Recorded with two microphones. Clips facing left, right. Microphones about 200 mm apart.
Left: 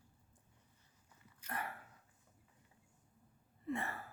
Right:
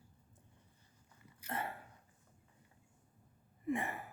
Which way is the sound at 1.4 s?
25° right (ahead or behind).